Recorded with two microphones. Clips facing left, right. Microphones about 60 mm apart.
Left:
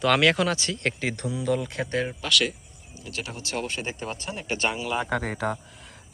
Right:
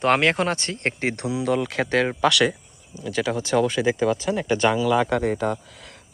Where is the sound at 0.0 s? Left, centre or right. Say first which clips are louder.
Right 2 dB; right.